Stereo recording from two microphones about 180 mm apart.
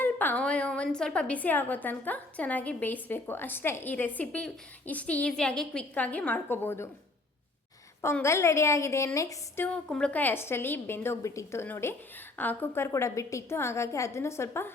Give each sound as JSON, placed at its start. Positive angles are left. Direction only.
{"t": 0.0, "sound": "a woman's voice", "side_deg": 10}
{"t": 8.0, "sound": "a woman's voice", "side_deg": 15}
{"t": 9.6, "sound": "a woman's voice", "side_deg": 5}